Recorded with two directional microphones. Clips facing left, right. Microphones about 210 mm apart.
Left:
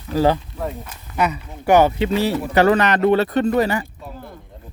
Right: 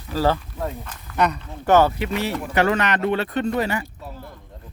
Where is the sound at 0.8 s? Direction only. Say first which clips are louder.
Right 1 dB; 5° left (ahead or behind).